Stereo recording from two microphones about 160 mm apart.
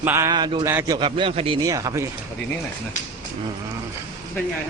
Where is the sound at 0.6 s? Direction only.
15° right (ahead or behind).